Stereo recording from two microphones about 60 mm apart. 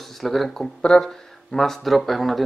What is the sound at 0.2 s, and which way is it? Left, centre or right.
Speech, centre.